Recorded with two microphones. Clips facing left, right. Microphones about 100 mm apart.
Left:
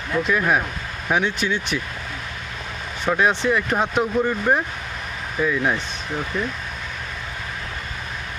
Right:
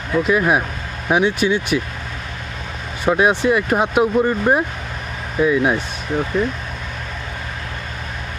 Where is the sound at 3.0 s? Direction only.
10° right (ahead or behind).